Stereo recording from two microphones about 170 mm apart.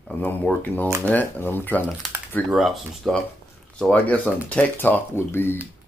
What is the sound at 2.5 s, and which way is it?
Speech, centre (ahead or behind).